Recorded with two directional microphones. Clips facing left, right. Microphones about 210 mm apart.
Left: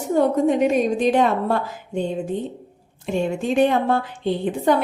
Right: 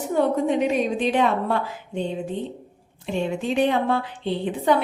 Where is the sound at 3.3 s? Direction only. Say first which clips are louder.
Left 3 dB; 45° left (ahead or behind).